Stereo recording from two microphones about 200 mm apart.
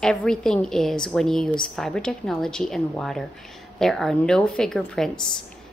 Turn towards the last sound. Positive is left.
turn(degrees=5)  # may be behind; listen again after turning